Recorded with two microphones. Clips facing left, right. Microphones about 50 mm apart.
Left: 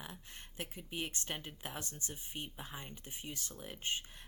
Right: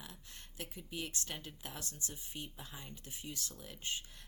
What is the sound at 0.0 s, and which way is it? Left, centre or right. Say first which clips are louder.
Speech: left 4 dB; left.